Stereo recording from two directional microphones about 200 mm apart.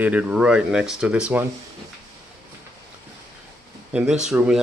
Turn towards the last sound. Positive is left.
turn(degrees=-5)  # may be behind; listen again after turning